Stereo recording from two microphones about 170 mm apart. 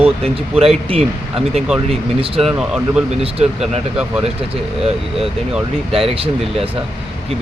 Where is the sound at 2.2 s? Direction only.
35° right (ahead or behind).